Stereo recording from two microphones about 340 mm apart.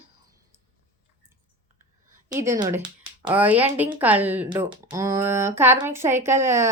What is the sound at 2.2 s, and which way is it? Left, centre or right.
Speech, centre.